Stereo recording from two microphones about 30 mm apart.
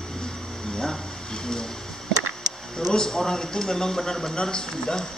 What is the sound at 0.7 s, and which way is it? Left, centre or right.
Speech, centre.